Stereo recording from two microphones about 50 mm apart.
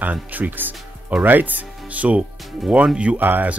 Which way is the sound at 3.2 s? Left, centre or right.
Right.